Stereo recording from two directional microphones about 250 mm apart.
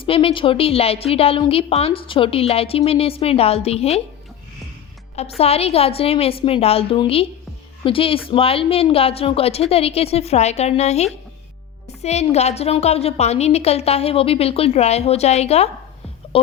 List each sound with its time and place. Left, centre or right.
0.0 s a woman's voice: left
5.4 s a woman's voice: left